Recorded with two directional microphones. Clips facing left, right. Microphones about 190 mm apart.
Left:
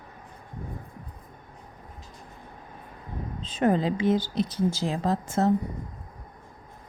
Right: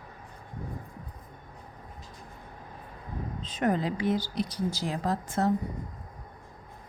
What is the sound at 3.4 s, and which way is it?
A woman's voice, 30° left (ahead or behind).